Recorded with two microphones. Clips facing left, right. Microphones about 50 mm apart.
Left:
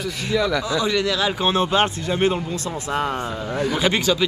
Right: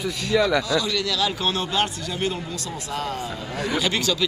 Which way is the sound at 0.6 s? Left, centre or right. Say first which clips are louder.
Left 3 dB; left.